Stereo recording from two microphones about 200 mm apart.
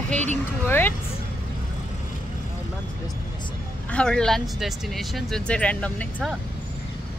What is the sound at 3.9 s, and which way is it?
Speech, 5° left (ahead or behind).